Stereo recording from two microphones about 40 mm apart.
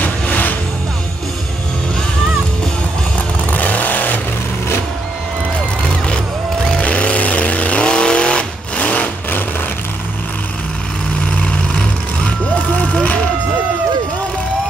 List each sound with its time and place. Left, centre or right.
0.0 s music: left
3.4 s vehicle: left
6.0 s music: left
6.8 s vehicle: left
7.9 s vehicle: left
13.0 s vehicle: left